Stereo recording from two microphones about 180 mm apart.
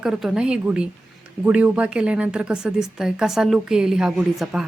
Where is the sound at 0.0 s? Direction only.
5° right (ahead or behind).